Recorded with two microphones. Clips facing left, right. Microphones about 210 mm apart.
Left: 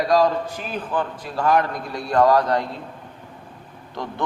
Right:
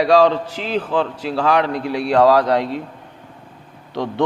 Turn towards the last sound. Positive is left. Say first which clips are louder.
# right 7 dB
turn(degrees=-70)  # may be behind; listen again after turning